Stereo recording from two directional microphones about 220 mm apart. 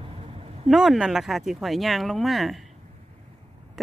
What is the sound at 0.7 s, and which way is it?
Speech, centre (ahead or behind).